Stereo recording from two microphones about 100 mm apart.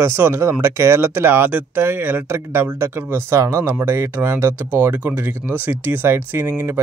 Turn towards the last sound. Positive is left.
turn(degrees=-20)  # may be behind; listen again after turning